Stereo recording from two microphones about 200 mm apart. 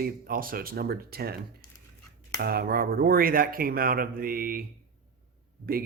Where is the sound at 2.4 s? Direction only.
50° right (ahead or behind).